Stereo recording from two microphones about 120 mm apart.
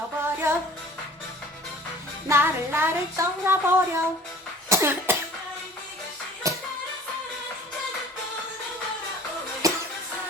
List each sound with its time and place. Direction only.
0.2 s music: 20° right (ahead or behind)
2.2 s music: 20° right (ahead or behind)
4.7 s cough: 20° right (ahead or behind)
6.4 s music: 25° right (ahead or behind)
9.6 s music: 30° right (ahead or behind)